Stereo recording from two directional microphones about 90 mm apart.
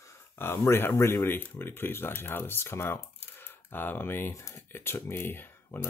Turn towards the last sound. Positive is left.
turn(degrees=25)  # may be behind; listen again after turning